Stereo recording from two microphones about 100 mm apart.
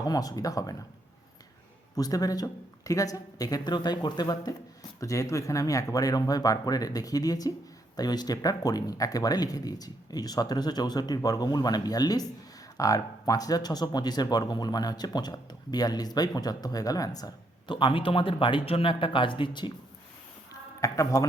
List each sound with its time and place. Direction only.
0.0 s speech: 40° left (ahead or behind)
2.0 s speech: 40° left (ahead or behind)
17.7 s speech: 55° left (ahead or behind)
20.5 s a sound: 35° left (ahead or behind)